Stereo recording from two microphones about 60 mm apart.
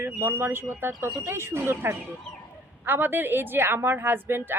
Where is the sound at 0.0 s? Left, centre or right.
Right.